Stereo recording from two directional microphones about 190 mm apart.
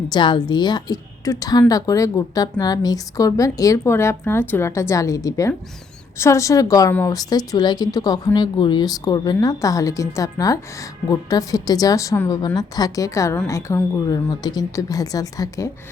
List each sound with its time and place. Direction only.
0.1 s a woman's voice: 25° left (ahead or behind)